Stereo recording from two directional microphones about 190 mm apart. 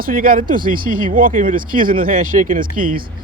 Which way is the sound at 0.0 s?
50° right (ahead or behind).